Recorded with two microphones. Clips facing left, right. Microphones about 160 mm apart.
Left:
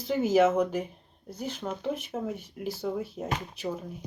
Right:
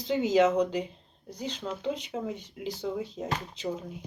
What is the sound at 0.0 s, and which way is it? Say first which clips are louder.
Speech: left 1 dB; 20° right (ahead or behind).